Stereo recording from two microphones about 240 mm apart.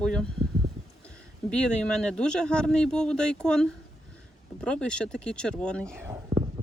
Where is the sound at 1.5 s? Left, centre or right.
Centre.